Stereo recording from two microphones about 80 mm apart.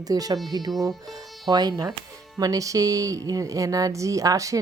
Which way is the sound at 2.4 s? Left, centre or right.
Right.